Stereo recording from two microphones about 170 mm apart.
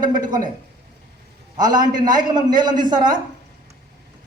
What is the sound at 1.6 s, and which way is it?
A man's voice, 25° right (ahead or behind).